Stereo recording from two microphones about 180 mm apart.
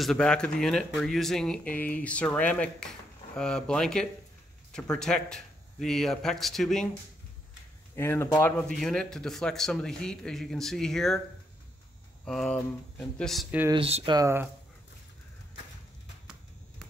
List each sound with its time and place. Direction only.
0.0 s speech: 5° left (ahead or behind)
12.3 s speech: 5° left (ahead or behind)
13.7 s speech: 30° right (ahead or behind)
14.1 s speech: 15° right (ahead or behind)